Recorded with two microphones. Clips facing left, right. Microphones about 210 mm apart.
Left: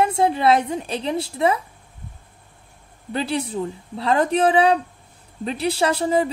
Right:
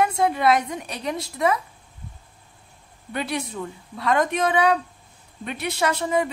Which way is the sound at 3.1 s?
30° left (ahead or behind).